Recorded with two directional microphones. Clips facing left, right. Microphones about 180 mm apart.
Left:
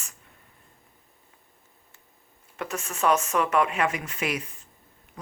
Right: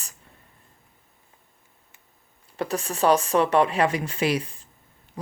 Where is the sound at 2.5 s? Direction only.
35° right (ahead or behind).